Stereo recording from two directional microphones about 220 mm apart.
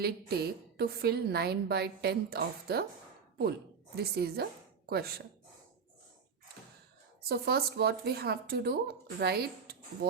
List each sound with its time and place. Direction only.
0.0 s a woman's voice: 45° right (ahead or behind)
3.9 s a woman's voice: 45° right (ahead or behind)
7.3 s a woman's voice: 45° right (ahead or behind)